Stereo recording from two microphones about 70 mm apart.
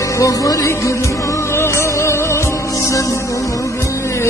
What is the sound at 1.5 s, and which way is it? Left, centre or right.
Music, left.